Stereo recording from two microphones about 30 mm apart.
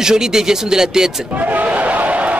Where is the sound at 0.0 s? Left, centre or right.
Right.